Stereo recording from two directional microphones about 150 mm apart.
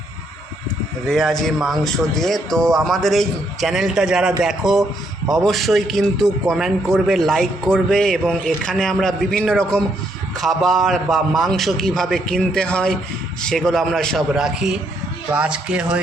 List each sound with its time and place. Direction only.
1.0 s a man's voice: centre (ahead or behind)